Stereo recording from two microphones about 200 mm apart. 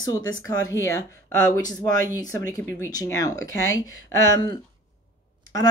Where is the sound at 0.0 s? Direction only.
20° left (ahead or behind).